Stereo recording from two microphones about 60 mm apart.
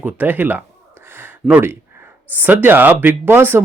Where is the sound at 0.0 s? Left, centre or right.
Right.